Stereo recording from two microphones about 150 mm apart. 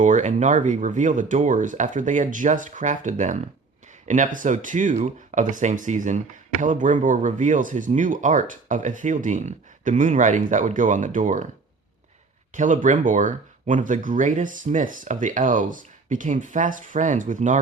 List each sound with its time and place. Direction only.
0.0 s speech: 55° right (ahead or behind)
12.5 s speech: 55° right (ahead or behind)